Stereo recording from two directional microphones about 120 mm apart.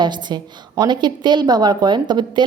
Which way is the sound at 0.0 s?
40° right (ahead or behind).